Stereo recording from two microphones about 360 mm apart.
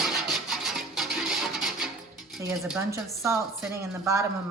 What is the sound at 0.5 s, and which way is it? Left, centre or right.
Music, centre.